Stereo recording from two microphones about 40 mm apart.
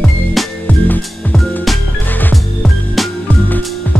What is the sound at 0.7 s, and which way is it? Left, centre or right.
Music, left.